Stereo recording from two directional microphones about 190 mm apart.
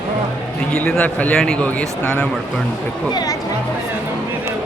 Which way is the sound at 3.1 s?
20° left (ahead or behind).